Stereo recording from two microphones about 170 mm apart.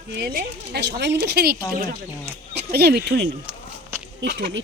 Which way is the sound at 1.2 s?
70° right (ahead or behind).